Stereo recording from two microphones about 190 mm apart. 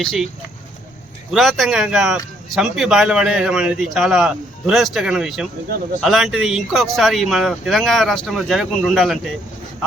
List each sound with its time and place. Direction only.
0.0 s speech: centre (ahead or behind)
1.3 s speech: centre (ahead or behind)